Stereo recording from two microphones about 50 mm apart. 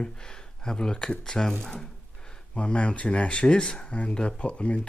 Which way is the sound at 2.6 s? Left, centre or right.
Left.